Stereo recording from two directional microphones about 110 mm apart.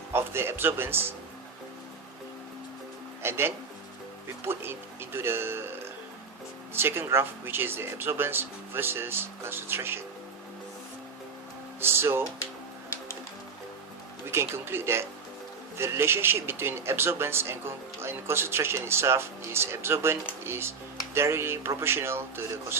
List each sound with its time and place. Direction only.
0.1 s speech: 20° right (ahead or behind)
3.2 s speech: 20° right (ahead or behind)
11.8 s speech: 20° right (ahead or behind)
14.3 s speech: 20° right (ahead or behind)